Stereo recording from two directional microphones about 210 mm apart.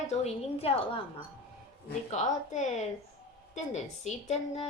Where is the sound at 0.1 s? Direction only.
30° left (ahead or behind).